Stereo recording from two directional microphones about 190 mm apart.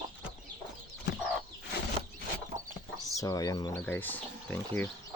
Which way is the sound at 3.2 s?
20° left (ahead or behind).